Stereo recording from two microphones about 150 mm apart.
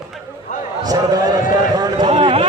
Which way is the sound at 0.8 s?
25° right (ahead or behind).